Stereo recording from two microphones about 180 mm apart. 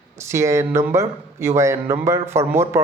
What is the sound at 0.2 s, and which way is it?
Speech, 15° right (ahead or behind).